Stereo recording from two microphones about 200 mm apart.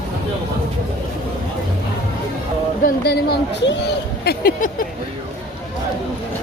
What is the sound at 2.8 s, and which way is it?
Speech, 50° left (ahead or behind).